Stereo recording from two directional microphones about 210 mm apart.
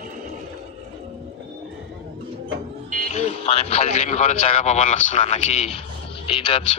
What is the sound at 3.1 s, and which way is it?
A man's voice, 30° left (ahead or behind).